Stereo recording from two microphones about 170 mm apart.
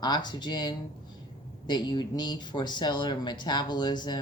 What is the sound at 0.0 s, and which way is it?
Speech, 25° left (ahead or behind).